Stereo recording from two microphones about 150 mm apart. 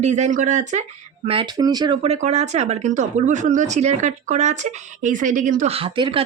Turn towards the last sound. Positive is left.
turn(degrees=-35)  # may be behind; listen again after turning